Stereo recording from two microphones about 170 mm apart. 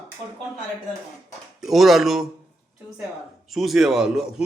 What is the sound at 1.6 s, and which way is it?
Speech, centre (ahead or behind).